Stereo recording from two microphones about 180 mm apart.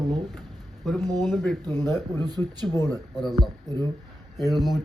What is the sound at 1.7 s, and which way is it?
Speech, 15° left (ahead or behind).